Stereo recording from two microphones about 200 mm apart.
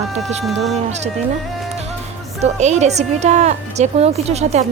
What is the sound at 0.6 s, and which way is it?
Speech, 35° right (ahead or behind).